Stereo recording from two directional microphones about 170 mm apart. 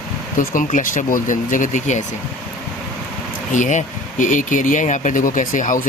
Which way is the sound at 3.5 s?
45° left (ahead or behind).